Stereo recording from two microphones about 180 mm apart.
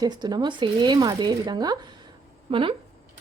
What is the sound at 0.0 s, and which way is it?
Speech, 20° right (ahead or behind).